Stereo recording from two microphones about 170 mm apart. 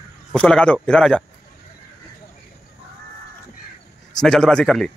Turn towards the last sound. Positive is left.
turn(degrees=5)  # may be behind; listen again after turning